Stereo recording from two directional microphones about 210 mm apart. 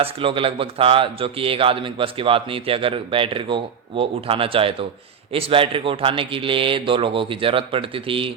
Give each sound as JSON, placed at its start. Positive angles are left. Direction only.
{"t": 0.0, "sound": "a man's voice", "side_deg": -25}